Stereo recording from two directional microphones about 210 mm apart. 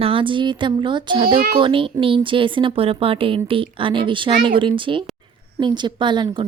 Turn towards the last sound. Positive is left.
turn(degrees=-20)  # may be behind; listen again after turning